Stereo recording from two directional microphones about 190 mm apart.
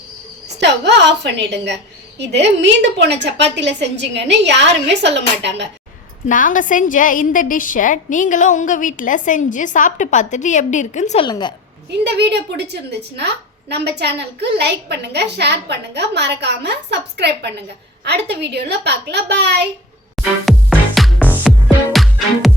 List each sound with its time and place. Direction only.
0.6 s a woman's voice: 65° right (ahead or behind)
6.2 s a woman's voice: 45° left (ahead or behind)
11.3 s a woman's voice: 20° left (ahead or behind)
11.9 s a woman's voice: 60° right (ahead or behind)
20.1 s music: centre (ahead or behind)